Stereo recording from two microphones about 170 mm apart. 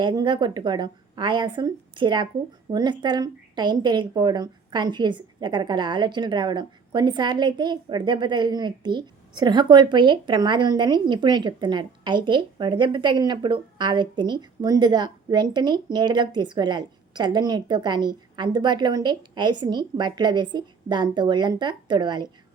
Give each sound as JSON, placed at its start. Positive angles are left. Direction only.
{"t": 0.0, "sound": "a woman's voice", "side_deg": -25}